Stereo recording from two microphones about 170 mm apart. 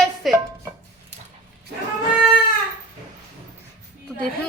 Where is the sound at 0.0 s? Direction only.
Centre (ahead or behind).